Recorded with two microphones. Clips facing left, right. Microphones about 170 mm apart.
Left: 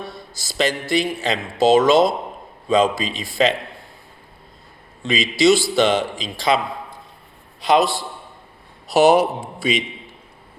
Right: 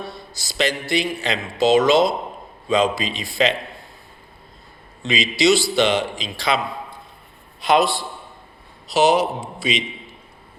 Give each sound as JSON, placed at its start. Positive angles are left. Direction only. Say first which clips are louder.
{"t": 0.4, "sound": "a man's voice", "louder": "left 1 dB", "side_deg": 45}
{"t": 5.0, "sound": "a man's voice", "louder": "left 2 dB", "side_deg": 50}
{"t": 7.6, "sound": "a man's voice", "louder": "left 1 dB", "side_deg": 40}
{"t": 8.9, "sound": "a man's voice", "louder": "left 3 dB", "side_deg": 55}